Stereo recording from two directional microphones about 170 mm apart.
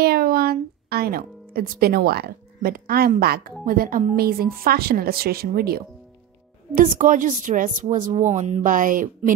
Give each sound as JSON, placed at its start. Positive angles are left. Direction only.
{"t": 0.0, "sound": "a woman's voice", "side_deg": -65}
{"t": 6.7, "sound": "a woman's voice", "side_deg": -50}